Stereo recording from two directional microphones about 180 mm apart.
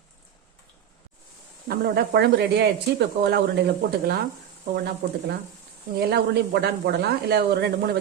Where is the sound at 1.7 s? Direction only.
60° right (ahead or behind).